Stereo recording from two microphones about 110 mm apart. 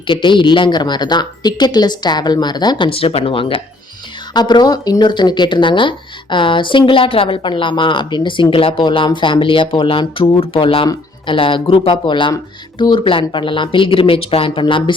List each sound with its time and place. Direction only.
0.1 s a woman's voice: 45° left (ahead or behind)
4.4 s speech: 40° left (ahead or behind)